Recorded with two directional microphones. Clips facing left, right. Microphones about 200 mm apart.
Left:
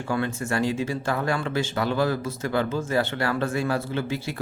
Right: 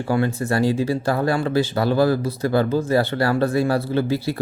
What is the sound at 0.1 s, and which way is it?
Speech, 35° right (ahead or behind).